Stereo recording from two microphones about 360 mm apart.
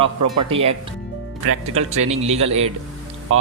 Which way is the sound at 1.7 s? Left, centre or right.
Centre.